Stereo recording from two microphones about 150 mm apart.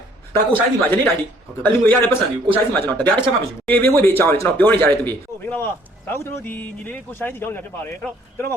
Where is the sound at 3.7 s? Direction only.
15° left (ahead or behind).